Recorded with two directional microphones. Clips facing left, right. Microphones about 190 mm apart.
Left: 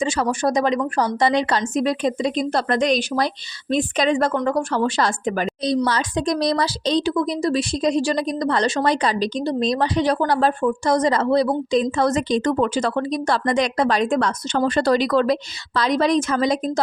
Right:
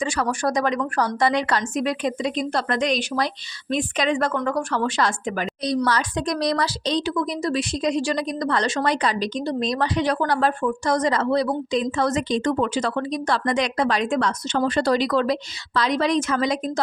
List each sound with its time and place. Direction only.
0.0 s speech: 25° left (ahead or behind)
5.6 s speech: 25° left (ahead or behind)